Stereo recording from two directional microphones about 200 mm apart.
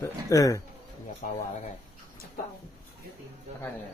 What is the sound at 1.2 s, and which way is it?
Speech, 40° left (ahead or behind).